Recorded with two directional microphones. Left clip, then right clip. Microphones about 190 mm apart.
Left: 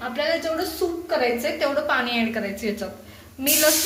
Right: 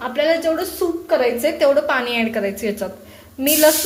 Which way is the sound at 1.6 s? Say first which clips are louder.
Right 7 dB; 40° right (ahead or behind).